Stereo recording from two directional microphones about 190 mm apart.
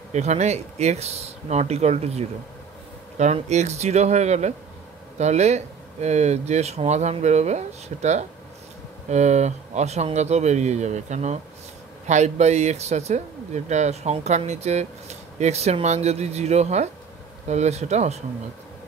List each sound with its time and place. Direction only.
0.1 s speech: 35° right (ahead or behind)